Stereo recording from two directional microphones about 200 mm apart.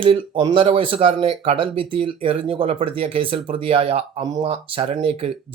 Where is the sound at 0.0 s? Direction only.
25° right (ahead or behind).